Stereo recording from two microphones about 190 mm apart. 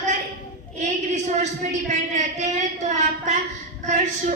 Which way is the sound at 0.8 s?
40° right (ahead or behind).